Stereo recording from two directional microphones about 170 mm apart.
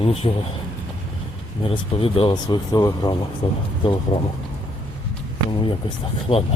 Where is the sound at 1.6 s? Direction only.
30° left (ahead or behind).